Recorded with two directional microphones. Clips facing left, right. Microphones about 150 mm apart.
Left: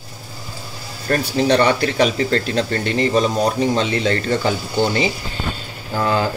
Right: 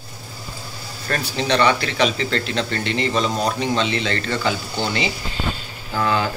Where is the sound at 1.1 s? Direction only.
45° left (ahead or behind).